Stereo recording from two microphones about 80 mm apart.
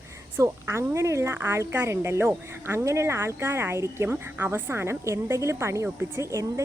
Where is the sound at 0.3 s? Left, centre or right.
Right.